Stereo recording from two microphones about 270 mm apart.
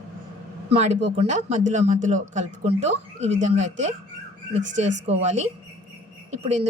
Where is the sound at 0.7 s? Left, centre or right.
Right.